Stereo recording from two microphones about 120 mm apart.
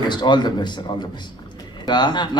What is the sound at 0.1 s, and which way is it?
Speech, 40° left (ahead or behind).